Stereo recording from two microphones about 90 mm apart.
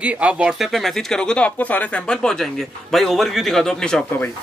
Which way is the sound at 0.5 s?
Centre (ahead or behind).